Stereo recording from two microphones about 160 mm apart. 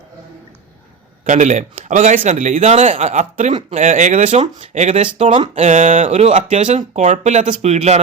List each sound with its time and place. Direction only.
1.2 s speech: 50° right (ahead or behind)